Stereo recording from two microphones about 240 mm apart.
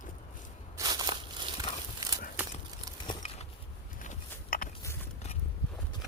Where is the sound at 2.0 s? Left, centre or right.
Centre.